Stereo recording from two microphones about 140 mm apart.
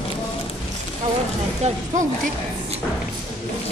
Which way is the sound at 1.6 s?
60° right (ahead or behind).